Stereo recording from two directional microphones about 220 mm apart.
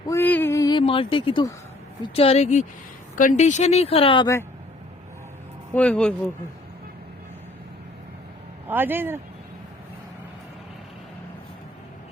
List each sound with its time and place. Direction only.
0.1 s a sound: 10° left (ahead or behind)
2.0 s a woman's voice: 25° left (ahead or behind)
5.7 s speech: 5° left (ahead or behind)
8.6 s speech: 10° right (ahead or behind)